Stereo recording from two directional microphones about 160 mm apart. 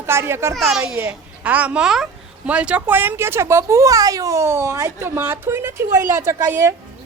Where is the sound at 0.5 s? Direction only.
Centre (ahead or behind); by 6.7 s 20° right (ahead or behind).